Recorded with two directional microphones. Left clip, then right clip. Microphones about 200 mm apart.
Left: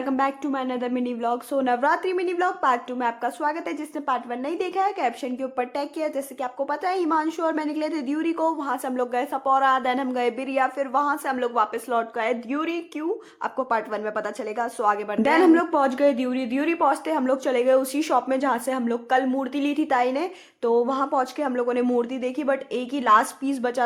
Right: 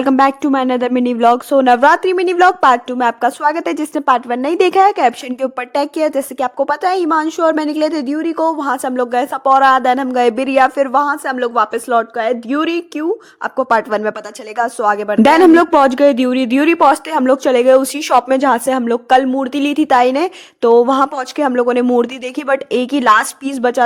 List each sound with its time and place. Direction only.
0.0 s speech: 55° right (ahead or behind); by 15.2 s 30° right (ahead or behind)
15.2 s a woman's voice: 50° right (ahead or behind)